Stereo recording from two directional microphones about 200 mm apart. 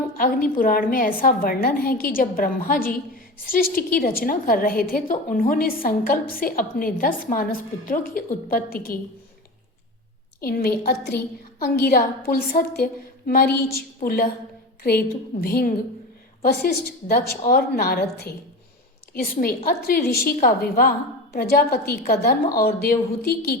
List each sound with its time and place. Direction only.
0.2 s a woman's voice: 45° left (ahead or behind)
10.4 s a woman's voice: 50° left (ahead or behind)